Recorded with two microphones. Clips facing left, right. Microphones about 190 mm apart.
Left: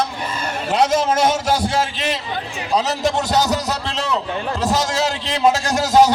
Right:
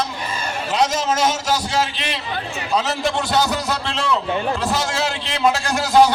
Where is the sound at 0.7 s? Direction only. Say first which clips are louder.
Left 3 dB; 55° left (ahead or behind).